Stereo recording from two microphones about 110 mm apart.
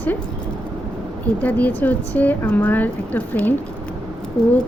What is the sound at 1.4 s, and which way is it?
Speech, 15° left (ahead or behind).